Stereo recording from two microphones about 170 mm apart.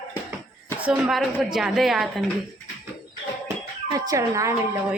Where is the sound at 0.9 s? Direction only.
Centre (ahead or behind).